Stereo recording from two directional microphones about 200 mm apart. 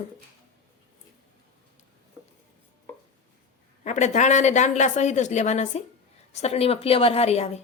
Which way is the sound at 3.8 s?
35° left (ahead or behind).